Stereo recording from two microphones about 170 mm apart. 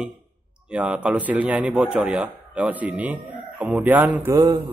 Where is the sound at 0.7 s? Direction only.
5° right (ahead or behind).